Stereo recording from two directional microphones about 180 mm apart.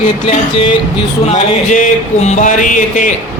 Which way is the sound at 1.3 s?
45° left (ahead or behind).